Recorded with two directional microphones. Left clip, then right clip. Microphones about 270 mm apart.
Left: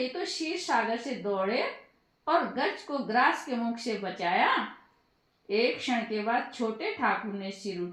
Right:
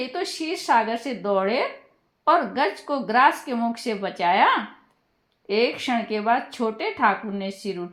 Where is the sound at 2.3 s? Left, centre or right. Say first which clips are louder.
Right 7 dB; right.